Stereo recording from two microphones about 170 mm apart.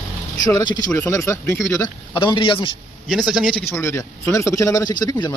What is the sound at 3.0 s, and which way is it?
Speech, centre (ahead or behind).